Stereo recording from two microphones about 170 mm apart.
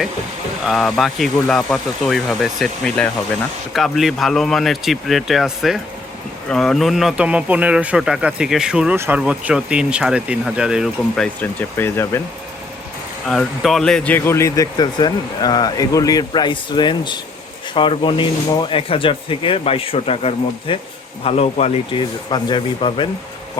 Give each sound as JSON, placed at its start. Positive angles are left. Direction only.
{"t": 0.6, "sound": "speech", "side_deg": 0}
{"t": 11.3, "sound": "speech", "side_deg": 15}
{"t": 13.2, "sound": "speech", "side_deg": 5}